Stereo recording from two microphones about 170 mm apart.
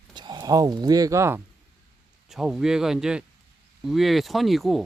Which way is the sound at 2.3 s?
Centre (ahead or behind).